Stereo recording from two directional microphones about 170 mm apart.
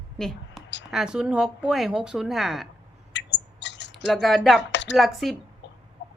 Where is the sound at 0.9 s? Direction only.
5° right (ahead or behind).